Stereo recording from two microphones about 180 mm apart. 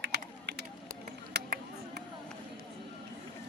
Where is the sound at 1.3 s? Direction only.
70° right (ahead or behind).